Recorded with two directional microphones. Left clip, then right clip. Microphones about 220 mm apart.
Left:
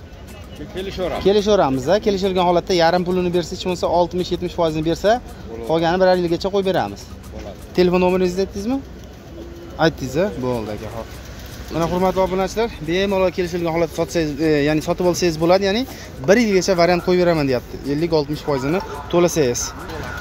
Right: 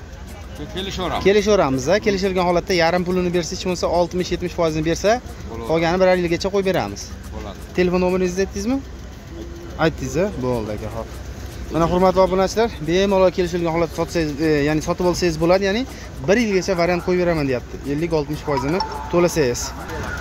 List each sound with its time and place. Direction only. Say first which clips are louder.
0.7 s speech: left 1 dB; 55° right (ahead or behind)
1.2 s speech: even; 5° left (ahead or behind)
7.7 s speech: left 3 dB; 15° left (ahead or behind)
9.8 s speech: left 2 dB; 10° left (ahead or behind)